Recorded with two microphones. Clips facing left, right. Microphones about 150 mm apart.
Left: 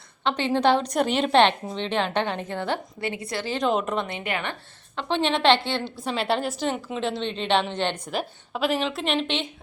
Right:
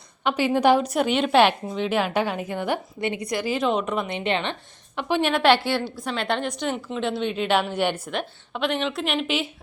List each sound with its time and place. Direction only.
0.3 s a woman's voice: 10° right (ahead or behind)
4.0 s a woman's voice: 20° right (ahead or behind)
4.9 s a woman's voice: 10° right (ahead or behind)
8.1 s a woman's voice: 5° left (ahead or behind)